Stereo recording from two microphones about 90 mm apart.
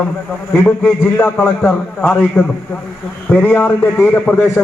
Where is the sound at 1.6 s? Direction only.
10° left (ahead or behind).